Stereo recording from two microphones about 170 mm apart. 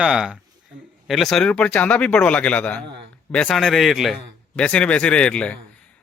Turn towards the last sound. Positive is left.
turn(degrees=5)  # may be behind; listen again after turning